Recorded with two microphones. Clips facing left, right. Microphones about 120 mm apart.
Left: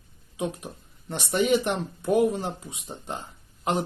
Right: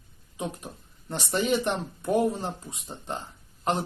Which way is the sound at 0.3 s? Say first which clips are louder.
Left 3 dB; 5° left (ahead or behind).